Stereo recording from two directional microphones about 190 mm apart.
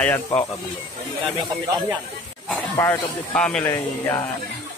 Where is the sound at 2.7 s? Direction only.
10° left (ahead or behind).